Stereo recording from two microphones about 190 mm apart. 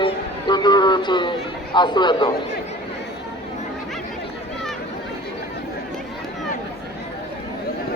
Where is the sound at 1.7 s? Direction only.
25° left (ahead or behind).